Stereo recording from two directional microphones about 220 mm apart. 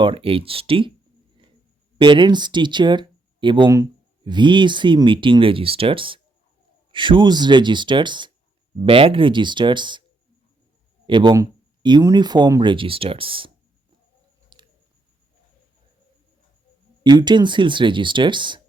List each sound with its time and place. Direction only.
0.0 s speech: 25° right (ahead or behind)
2.0 s speech: 20° right (ahead or behind)
11.0 s speech: 20° right (ahead or behind)
14.5 s a sound: 20° right (ahead or behind)
17.0 s speech: 20° right (ahead or behind)